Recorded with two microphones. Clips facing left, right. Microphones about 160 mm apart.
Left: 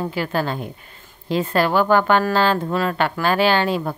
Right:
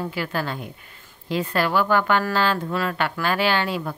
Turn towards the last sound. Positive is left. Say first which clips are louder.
# left 5 dB
turn(degrees=30)  # may be behind; listen again after turning